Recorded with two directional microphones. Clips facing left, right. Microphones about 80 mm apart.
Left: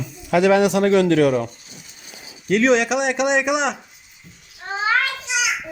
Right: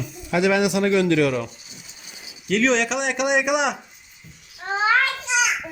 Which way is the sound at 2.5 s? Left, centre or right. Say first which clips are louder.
Left 4 dB; centre.